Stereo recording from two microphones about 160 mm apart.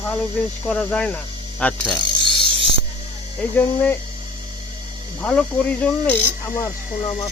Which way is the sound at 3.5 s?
10° left (ahead or behind).